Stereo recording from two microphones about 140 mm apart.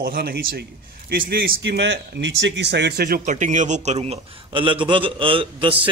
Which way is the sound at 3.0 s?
75° right (ahead or behind).